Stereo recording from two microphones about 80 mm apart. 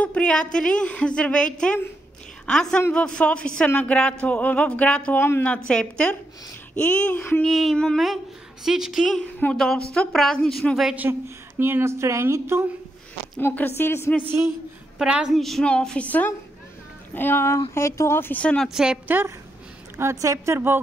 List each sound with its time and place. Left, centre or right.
0.0 s a woman's voice: centre
7.4 s speech: centre
7.7 s speech: centre
8.6 s speech: centre
9.5 s speech: centre
11.0 s a woman's voice: right
13.6 s speech: left
15.0 s a woman's voice: centre
15.3 s speech: centre
15.6 s speech: centre; by 18.4 s left
18.4 s speech: centre
18.7 s a woman's voice: centre
20.0 s a woman's voice: right
20.5 s speech: right